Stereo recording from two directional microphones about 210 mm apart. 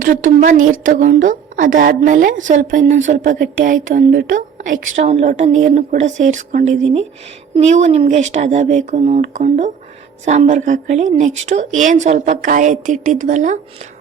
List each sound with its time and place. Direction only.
0.3 s speech: 35° right (ahead or behind)